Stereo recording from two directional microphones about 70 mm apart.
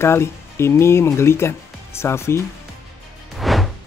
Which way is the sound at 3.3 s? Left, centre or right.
Centre.